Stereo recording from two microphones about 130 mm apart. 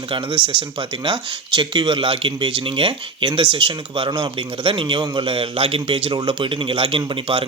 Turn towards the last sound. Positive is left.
turn(degrees=-45)  # may be behind; listen again after turning